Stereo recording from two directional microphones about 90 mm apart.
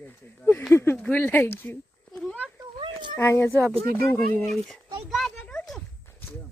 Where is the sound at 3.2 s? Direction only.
30° left (ahead or behind).